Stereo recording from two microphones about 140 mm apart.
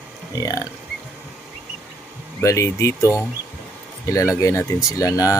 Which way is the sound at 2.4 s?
25° left (ahead or behind).